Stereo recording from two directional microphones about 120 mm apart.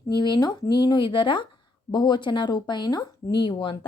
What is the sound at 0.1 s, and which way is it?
Speech, 40° left (ahead or behind).